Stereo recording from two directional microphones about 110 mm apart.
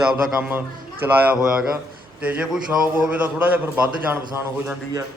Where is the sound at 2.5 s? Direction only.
15° right (ahead or behind).